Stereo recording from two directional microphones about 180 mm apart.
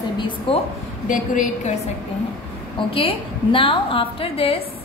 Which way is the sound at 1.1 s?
45° left (ahead or behind).